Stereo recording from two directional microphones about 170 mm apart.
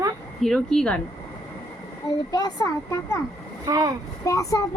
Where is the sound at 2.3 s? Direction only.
20° left (ahead or behind).